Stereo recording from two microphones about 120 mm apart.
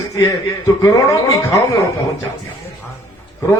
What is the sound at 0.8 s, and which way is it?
Speech, 30° left (ahead or behind).